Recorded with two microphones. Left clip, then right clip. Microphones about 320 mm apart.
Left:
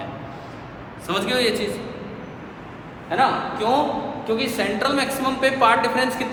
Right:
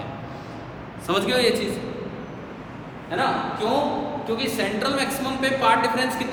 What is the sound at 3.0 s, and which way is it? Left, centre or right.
A man's voice, left.